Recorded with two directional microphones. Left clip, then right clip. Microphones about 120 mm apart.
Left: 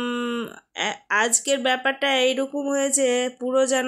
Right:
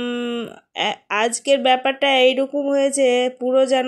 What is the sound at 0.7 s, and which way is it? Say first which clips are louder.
Speech: right 2 dB; 15° right (ahead or behind).